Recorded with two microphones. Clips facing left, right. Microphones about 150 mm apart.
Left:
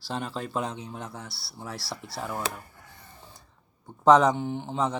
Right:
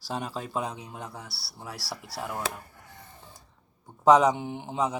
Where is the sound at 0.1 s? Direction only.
15° right (ahead or behind).